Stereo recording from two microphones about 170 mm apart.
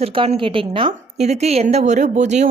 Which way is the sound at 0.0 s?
35° right (ahead or behind).